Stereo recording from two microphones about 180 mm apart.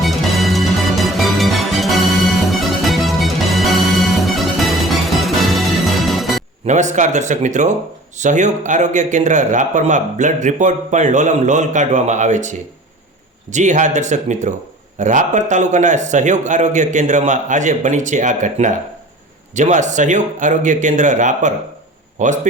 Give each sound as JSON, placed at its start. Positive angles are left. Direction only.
{"t": 0.0, "sound": "music", "side_deg": 0}
{"t": 6.7, "sound": "a man's voice", "side_deg": -40}